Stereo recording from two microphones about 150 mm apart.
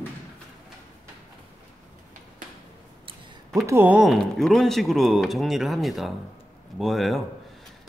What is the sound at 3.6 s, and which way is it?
Speech, 15° right (ahead or behind).